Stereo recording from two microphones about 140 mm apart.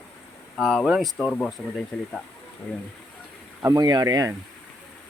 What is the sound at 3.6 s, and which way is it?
Speech, 25° right (ahead or behind).